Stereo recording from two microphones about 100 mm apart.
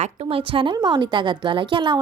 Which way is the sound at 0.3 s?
65° right (ahead or behind).